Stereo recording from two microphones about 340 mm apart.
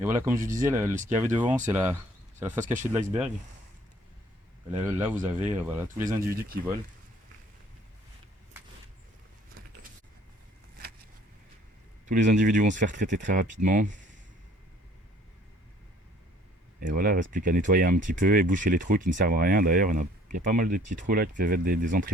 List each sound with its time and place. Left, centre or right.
0.0 s speech: centre
4.7 s speech: centre
12.0 s speech: right
16.8 s speech: right